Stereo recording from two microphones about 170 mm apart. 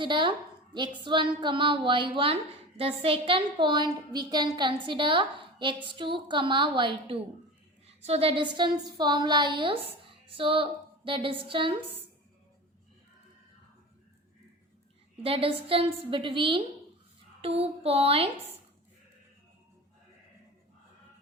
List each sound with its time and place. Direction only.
0.0 s a woman's voice: 30° right (ahead or behind)
15.2 s a woman's voice: 35° right (ahead or behind)